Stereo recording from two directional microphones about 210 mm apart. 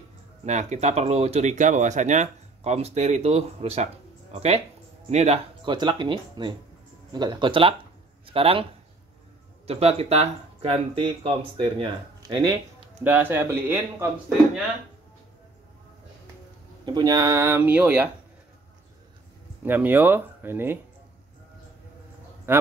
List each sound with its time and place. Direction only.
0.5 s a man's voice: 35° right (ahead or behind)
9.7 s speech: 30° right (ahead or behind)
13.0 s speech: 10° right (ahead or behind)
16.8 s speech: 20° right (ahead or behind)
19.6 s speech: 10° right (ahead or behind)
22.5 s a man's voice: 10° right (ahead or behind)